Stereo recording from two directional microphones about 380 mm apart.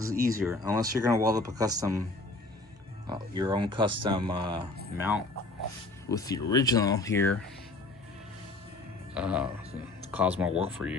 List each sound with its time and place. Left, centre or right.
0.1 s speech: right
0.3 s speech: centre
3.1 s speech: centre
6.1 s speech: centre
9.1 s speech: centre